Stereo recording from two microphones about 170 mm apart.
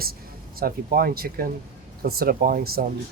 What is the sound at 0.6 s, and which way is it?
Speech, 60° right (ahead or behind).